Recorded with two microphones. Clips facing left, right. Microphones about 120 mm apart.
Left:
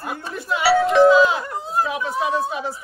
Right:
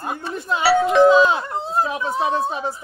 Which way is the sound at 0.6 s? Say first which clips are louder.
Even; centre (ahead or behind).